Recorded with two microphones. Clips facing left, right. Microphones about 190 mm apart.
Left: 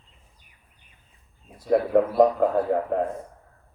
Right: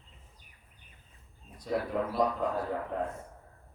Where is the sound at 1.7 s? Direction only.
55° left (ahead or behind).